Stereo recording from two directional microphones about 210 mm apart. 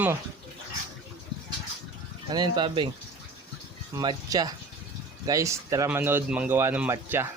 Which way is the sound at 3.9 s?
20° right (ahead or behind).